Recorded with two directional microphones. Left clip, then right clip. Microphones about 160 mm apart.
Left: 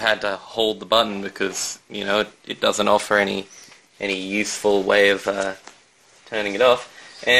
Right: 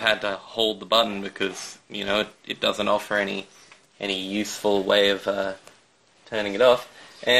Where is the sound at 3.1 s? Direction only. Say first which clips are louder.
Left 6 dB; 70° left (ahead or behind).